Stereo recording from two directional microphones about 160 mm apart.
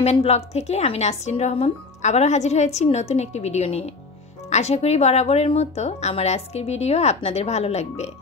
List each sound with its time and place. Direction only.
0.0 s speech: 40° left (ahead or behind)